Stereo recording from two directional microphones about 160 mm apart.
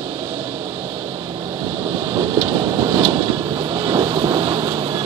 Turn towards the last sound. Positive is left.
turn(degrees=-30)  # may be behind; listen again after turning